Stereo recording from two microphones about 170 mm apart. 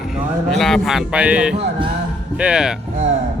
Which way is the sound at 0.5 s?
Centre (ahead or behind).